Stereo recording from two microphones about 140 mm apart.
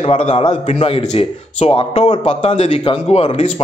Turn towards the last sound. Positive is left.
turn(degrees=45)  # may be behind; listen again after turning